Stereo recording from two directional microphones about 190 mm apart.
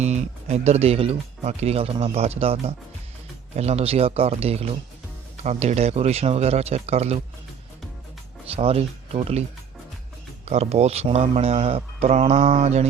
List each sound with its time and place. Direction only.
0.0 s speech: 35° right (ahead or behind)
8.5 s speech: 30° right (ahead or behind)
10.4 s speech: 35° right (ahead or behind)